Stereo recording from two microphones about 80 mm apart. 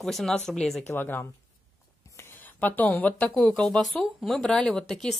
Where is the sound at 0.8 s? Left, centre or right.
Left.